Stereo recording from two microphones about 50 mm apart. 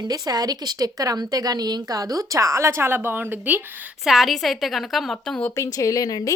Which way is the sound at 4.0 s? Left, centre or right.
Centre.